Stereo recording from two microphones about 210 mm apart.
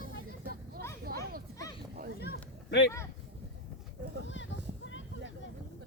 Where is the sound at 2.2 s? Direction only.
50° left (ahead or behind).